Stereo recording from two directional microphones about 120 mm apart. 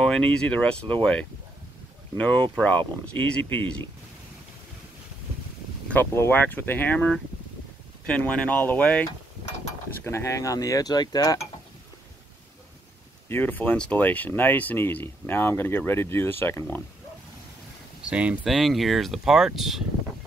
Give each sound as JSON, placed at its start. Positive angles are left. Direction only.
{"t": 0.0, "sound": "speech", "side_deg": 10}
{"t": 2.1, "sound": "speech", "side_deg": 10}
{"t": 5.9, "sound": "speech", "side_deg": 15}
{"t": 10.0, "sound": "speech", "side_deg": 25}
{"t": 13.3, "sound": "speech", "side_deg": 15}
{"t": 18.0, "sound": "speech", "side_deg": -10}